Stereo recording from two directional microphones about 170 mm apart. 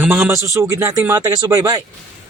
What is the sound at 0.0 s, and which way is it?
Speech, 15° right (ahead or behind).